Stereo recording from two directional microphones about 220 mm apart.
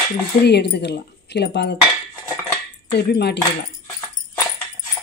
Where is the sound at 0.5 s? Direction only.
50° left (ahead or behind).